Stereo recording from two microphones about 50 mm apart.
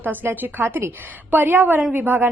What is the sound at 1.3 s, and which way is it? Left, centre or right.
Speech, right.